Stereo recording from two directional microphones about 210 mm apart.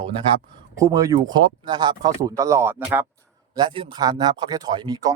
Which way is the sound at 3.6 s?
20° right (ahead or behind).